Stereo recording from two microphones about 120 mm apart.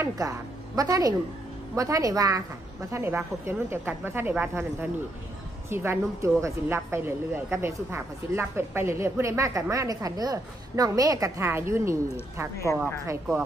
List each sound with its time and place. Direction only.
0.0 s a woman's voice: 30° right (ahead or behind)
2.9 s speech: 20° right (ahead or behind)
12.5 s a woman's voice: 25° left (ahead or behind)
13.0 s speech: 25° right (ahead or behind)